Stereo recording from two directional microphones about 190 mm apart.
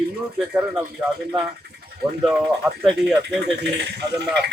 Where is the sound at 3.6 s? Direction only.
60° right (ahead or behind).